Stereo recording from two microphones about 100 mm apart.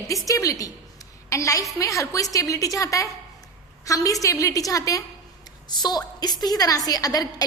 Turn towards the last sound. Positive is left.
turn(degrees=40)  # may be behind; listen again after turning